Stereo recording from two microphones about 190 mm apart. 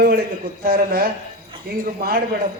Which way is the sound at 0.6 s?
55° right (ahead or behind).